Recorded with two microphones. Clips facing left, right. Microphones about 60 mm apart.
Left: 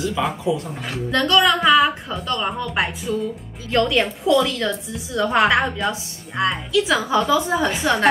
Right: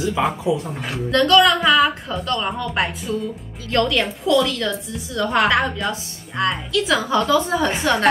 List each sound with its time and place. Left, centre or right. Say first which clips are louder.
0.2 s speech: right 2 dB; right
1.1 s a woman's voice: right 3 dB; centre
3.9 s a woman's voice: left 1 dB; centre